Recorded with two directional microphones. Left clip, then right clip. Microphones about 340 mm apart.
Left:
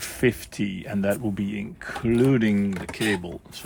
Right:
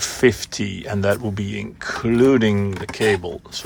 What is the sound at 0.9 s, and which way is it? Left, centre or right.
Speech, left.